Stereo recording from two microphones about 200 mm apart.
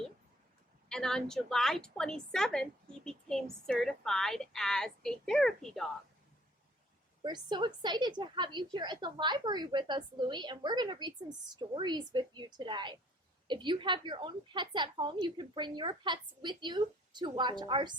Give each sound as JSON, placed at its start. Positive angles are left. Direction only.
{"t": 0.9, "sound": "a woman's voice", "side_deg": 0}
{"t": 7.2, "sound": "a woman's voice", "side_deg": -20}